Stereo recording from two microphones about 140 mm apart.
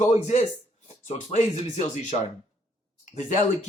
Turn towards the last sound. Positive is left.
turn(degrees=55)  # may be behind; listen again after turning